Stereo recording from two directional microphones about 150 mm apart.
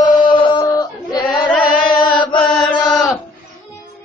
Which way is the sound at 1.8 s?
30° left (ahead or behind).